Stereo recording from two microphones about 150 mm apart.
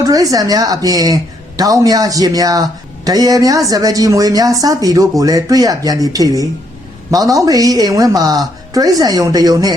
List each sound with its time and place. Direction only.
0.0 s a woman's voice: 25° right (ahead or behind)